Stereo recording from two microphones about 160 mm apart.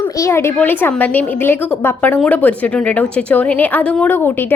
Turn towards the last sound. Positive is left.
turn(degrees=10)  # may be behind; listen again after turning